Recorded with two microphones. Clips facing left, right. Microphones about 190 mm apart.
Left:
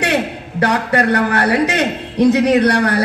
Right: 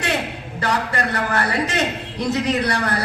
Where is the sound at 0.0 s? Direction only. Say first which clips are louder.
Left 6 dB; 60° left (ahead or behind).